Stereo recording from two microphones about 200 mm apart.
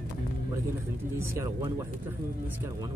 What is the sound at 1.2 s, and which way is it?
Speech, 15° right (ahead or behind).